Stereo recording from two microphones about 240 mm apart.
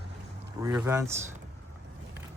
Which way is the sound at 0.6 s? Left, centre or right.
Centre.